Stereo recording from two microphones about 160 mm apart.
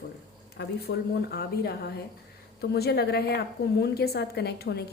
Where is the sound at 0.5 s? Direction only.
85° left.